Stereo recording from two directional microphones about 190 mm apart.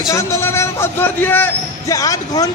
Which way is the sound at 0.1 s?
15° left (ahead or behind).